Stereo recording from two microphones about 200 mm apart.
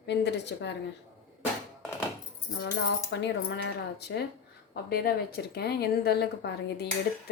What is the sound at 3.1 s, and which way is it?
A woman's voice, 60° left (ahead or behind).